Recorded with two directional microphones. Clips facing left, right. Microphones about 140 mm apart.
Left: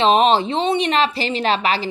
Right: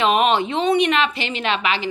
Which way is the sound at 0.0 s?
30° left (ahead or behind).